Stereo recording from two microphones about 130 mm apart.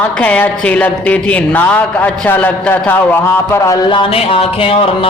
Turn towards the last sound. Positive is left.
turn(degrees=45)  # may be behind; listen again after turning